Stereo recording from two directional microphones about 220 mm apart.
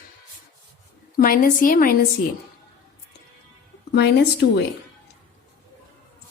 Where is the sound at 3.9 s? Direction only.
50° left (ahead or behind).